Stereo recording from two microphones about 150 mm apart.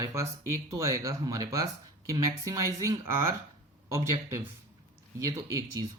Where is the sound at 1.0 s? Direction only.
20° right (ahead or behind).